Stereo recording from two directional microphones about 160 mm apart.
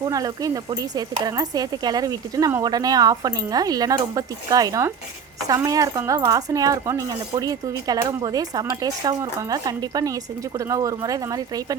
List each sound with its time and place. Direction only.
0.0 s speech: 25° right (ahead or behind)